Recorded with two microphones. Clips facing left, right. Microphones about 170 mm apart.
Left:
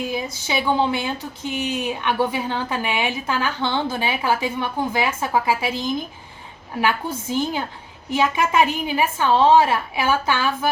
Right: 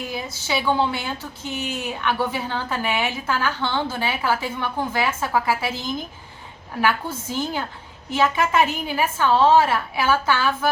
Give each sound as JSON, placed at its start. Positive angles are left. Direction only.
{"t": 0.1, "sound": "a woman's voice", "side_deg": 15}